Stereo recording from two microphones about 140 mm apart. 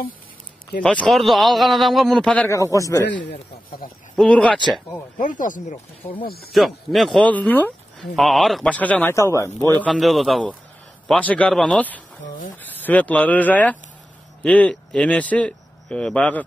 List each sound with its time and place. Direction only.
0.8 s a man's voice: 5° left (ahead or behind)
2.5 s a man's voice: 25° left (ahead or behind)
4.2 s a man's voice: 5° left (ahead or behind)
5.1 s speech: 70° left (ahead or behind)
6.2 s speech: 90° left
6.5 s a man's voice: centre (ahead or behind)
8.2 s a man's voice: centre (ahead or behind)
9.9 s a man's voice: centre (ahead or behind)